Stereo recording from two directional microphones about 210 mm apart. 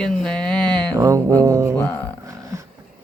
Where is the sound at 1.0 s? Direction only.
15° right (ahead or behind).